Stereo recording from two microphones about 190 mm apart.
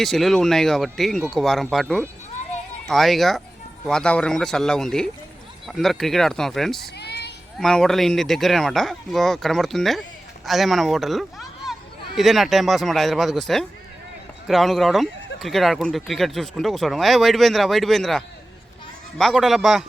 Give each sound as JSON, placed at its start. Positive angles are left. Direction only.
{"t": 0.0, "sound": "speech", "side_deg": 0}
{"t": 7.0, "sound": "a sound", "side_deg": 60}
{"t": 7.6, "sound": "speech", "side_deg": 0}
{"t": 14.4, "sound": "speech", "side_deg": 0}
{"t": 19.2, "sound": "speech", "side_deg": 0}